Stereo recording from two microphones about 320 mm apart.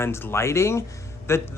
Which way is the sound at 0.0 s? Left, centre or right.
Centre.